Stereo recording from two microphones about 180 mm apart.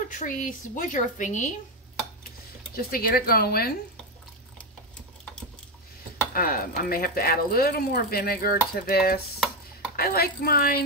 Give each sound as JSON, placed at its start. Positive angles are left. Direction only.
{"t": 0.1, "sound": "speech", "side_deg": 45}
{"t": 2.7, "sound": "speech", "side_deg": 55}
{"t": 6.3, "sound": "speech", "side_deg": 55}